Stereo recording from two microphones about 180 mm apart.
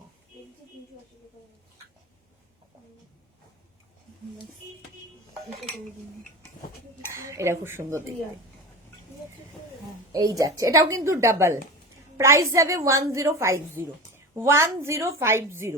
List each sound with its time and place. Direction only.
7.1 s a woman's voice: 15° right (ahead or behind)
10.1 s a woman's voice: 20° right (ahead or behind)